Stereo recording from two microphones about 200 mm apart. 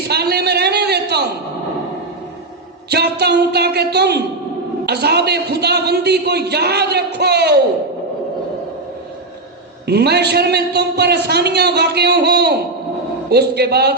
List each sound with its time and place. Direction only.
0.1 s a sound: 55° right (ahead or behind)
2.9 s a man's voice: 55° right (ahead or behind)
9.8 s a man's voice: 55° right (ahead or behind)